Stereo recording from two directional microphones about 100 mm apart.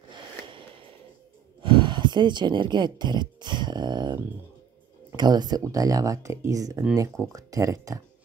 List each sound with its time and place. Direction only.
0.1 s a sound: 60° right (ahead or behind)
1.6 s gasp: 55° right (ahead or behind)
5.1 s speech: 45° right (ahead or behind)